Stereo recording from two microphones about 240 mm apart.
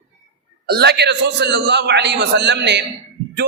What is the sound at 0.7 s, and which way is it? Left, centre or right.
A man's voice, right.